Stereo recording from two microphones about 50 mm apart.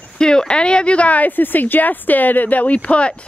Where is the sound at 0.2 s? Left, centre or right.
Centre.